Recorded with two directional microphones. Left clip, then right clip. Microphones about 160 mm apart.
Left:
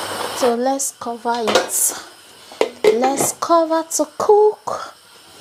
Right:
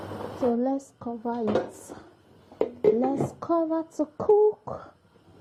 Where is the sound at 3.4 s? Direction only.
10° left (ahead or behind).